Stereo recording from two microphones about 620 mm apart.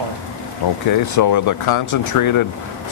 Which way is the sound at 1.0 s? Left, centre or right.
Left.